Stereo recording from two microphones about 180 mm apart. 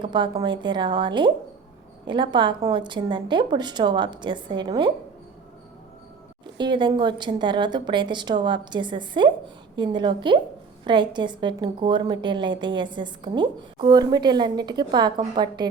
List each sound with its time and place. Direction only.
0.0 s a woman's voice: 25° right (ahead or behind)
6.6 s a woman's voice: 25° right (ahead or behind)